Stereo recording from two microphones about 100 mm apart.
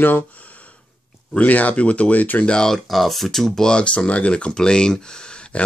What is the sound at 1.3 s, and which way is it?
Speech, 15° left (ahead or behind).